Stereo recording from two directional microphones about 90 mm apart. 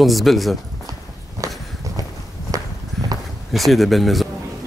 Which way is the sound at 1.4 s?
40° right (ahead or behind).